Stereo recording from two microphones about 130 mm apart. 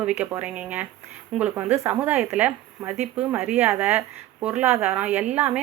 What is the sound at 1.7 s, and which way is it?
A woman's voice, 20° right (ahead or behind).